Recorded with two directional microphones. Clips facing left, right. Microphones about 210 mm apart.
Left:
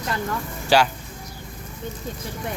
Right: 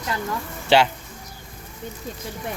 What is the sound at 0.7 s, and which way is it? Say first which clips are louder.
Speech: right 1 dB; 25° right (ahead or behind).